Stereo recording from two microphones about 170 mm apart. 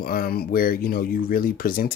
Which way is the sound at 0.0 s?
60° left (ahead or behind).